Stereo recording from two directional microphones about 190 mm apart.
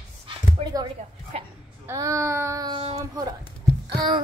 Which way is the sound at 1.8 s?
15° right (ahead or behind).